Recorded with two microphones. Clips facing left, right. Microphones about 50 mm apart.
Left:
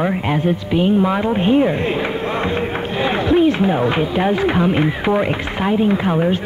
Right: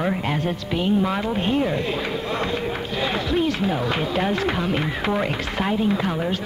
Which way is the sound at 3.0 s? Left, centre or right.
Left.